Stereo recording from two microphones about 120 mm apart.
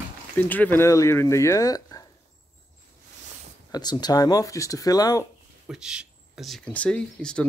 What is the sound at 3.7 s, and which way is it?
Speech, 35° left (ahead or behind).